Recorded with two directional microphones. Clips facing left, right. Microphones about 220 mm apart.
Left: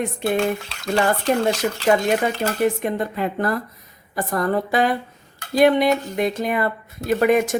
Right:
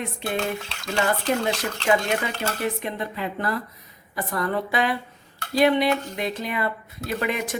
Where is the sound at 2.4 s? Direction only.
45° left (ahead or behind).